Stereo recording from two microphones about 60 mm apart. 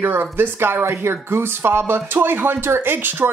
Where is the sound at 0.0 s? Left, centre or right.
Right.